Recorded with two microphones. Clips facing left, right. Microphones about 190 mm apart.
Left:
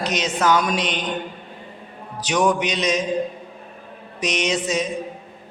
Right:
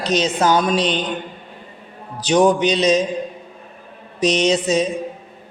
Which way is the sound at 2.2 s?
30° right (ahead or behind).